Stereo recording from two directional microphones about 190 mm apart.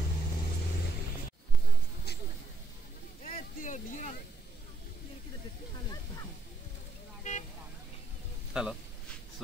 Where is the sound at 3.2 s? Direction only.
45° left (ahead or behind).